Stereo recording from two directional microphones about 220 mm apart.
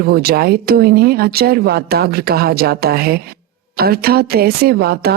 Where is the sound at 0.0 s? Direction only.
45° right (ahead or behind).